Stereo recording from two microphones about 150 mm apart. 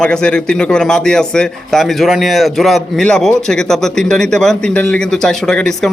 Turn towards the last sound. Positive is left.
turn(degrees=5)  # may be behind; listen again after turning